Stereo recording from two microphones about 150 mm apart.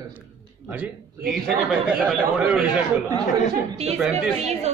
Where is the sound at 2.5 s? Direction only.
10° right (ahead or behind).